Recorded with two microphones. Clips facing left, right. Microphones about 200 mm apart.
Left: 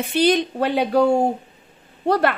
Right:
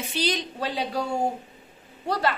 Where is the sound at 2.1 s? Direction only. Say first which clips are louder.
Left 7 dB; 60° left (ahead or behind).